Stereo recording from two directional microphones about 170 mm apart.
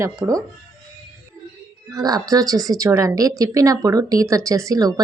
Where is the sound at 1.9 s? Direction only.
20° right (ahead or behind).